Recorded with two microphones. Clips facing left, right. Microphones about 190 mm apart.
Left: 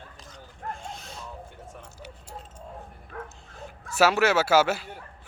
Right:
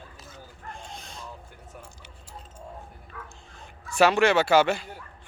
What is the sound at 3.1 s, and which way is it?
Bow-wow, 50° left (ahead or behind).